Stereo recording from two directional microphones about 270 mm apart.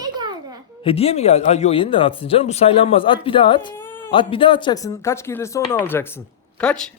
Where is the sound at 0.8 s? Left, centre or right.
Left.